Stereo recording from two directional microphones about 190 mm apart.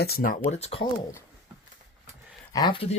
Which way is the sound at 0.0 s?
50° left (ahead or behind).